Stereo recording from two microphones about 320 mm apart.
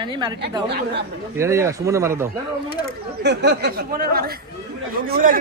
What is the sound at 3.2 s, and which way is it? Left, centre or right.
Speech, right.